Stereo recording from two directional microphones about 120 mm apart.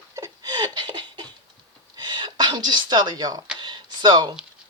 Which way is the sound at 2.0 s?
40° right (ahead or behind).